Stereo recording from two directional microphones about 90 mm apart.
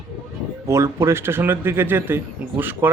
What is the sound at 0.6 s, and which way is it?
Speech, 30° right (ahead or behind).